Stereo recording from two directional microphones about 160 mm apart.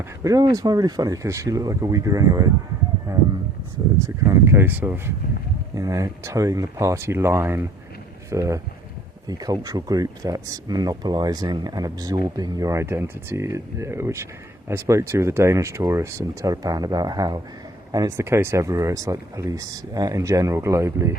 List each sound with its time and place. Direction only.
0.2 s speech: 20° right (ahead or behind)